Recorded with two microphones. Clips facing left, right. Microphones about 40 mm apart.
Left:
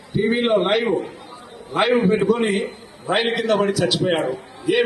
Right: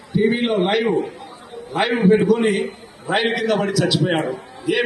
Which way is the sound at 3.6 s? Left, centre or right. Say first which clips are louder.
Even; centre.